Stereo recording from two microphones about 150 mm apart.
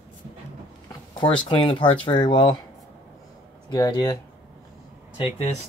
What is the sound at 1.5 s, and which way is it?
Speech, 35° left (ahead or behind).